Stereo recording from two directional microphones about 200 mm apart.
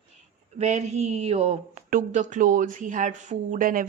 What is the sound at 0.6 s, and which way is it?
A woman's voice, 35° right (ahead or behind).